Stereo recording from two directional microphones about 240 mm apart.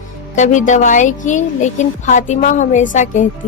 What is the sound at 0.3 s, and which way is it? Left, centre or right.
Speech, left.